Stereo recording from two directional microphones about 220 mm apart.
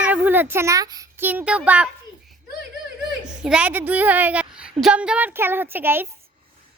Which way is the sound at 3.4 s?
5° right (ahead or behind).